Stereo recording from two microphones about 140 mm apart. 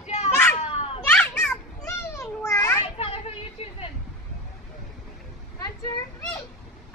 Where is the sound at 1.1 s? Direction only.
10° left (ahead or behind).